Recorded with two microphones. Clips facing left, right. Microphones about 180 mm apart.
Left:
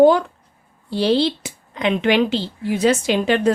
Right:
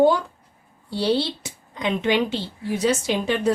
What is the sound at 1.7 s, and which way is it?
A woman's voice, 75° left (ahead or behind).